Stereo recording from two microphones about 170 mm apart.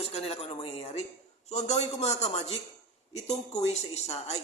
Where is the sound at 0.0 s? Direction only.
35° left (ahead or behind).